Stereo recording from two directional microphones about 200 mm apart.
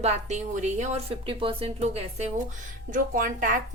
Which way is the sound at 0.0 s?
35° right (ahead or behind).